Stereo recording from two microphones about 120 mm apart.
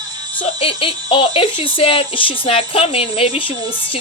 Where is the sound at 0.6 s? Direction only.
50° left (ahead or behind).